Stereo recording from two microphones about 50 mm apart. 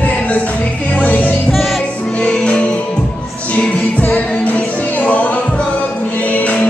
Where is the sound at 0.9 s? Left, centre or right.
Left.